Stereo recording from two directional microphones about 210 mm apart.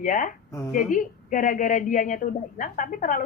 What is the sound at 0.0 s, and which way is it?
A woman's voice, 40° left (ahead or behind).